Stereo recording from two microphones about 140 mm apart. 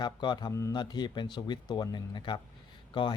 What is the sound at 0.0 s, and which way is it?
Speech, 30° left (ahead or behind).